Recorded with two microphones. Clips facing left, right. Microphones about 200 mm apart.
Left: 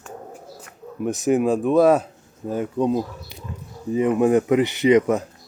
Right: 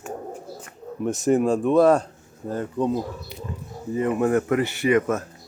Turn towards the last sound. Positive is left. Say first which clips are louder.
# left 4 dB
turn(degrees=20)  # may be behind; listen again after turning